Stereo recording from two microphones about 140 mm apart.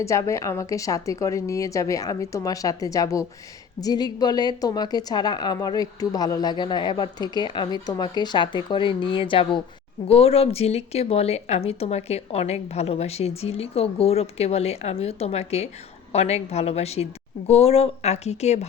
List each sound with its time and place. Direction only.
0.0 s a woman's voice: 20° left (ahead or behind); by 18.6 s 50° left (ahead or behind)